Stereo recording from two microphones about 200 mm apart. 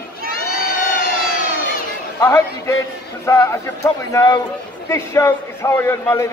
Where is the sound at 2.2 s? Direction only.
15° left (ahead or behind).